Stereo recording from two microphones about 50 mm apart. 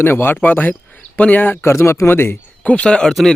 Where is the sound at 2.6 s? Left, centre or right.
Left.